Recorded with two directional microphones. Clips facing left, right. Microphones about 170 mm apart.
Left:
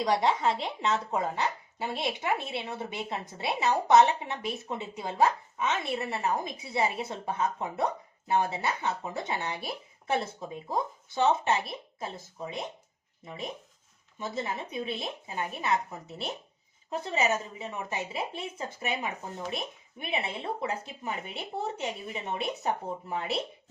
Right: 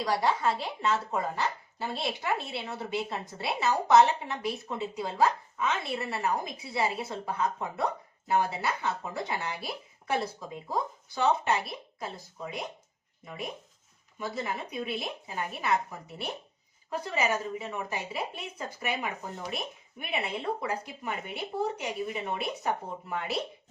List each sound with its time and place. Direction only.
0.0 s speech: 20° left (ahead or behind)
14.2 s speech: 25° left (ahead or behind)
20.0 s speech: 25° left (ahead or behind)